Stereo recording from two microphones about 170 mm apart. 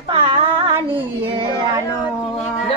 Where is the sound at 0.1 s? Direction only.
30° right (ahead or behind).